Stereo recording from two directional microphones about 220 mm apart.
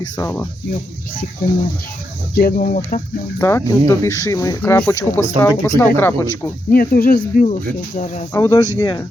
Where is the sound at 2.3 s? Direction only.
40° left (ahead or behind).